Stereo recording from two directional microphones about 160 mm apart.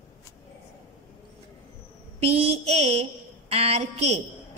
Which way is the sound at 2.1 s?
40° right (ahead or behind).